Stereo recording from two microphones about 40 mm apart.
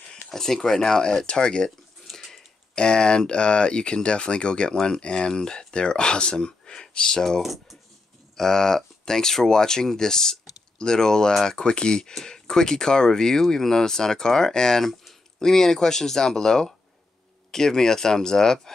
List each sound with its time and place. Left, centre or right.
0.3 s speech: centre
2.0 s a sound: centre
2.7 s speech: left
7.4 s speech: centre
8.4 s speech: centre